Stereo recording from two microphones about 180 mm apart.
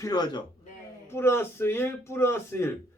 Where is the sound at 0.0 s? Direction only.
25° left (ahead or behind).